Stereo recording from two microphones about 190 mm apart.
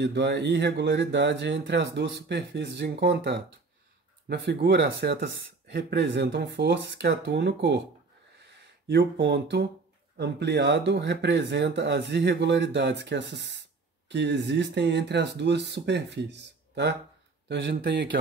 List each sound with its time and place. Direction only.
0.0 s speech: 65° right (ahead or behind)
8.4 s a sound: 65° right (ahead or behind)
10.1 s speech: 65° right (ahead or behind)